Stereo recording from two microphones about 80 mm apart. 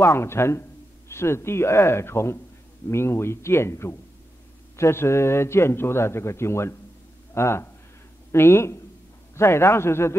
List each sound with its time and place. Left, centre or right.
0.0 s a man's voice: left